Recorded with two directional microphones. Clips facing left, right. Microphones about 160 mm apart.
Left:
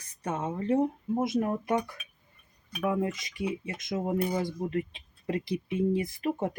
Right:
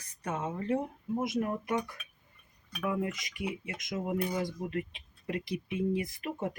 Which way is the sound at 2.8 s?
25° left (ahead or behind).